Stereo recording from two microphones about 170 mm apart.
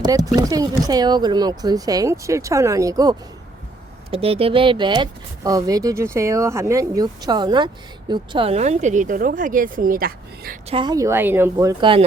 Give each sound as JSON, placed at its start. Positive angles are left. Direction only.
{"t": 0.0, "sound": "speech", "side_deg": -20}
{"t": 4.1, "sound": "speech", "side_deg": -35}
{"t": 10.7, "sound": "speech", "side_deg": -25}
{"t": 11.8, "sound": "speech", "side_deg": -30}